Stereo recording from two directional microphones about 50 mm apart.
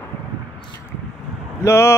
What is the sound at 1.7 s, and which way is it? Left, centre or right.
Speech, left.